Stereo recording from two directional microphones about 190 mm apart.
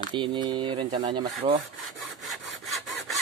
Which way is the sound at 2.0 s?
Centre (ahead or behind).